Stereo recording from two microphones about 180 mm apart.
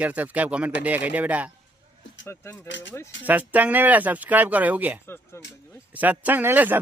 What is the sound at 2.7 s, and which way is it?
Speech, 90° left.